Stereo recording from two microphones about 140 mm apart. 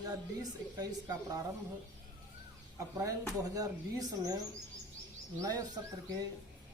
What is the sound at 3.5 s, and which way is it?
Speech, 30° right (ahead or behind).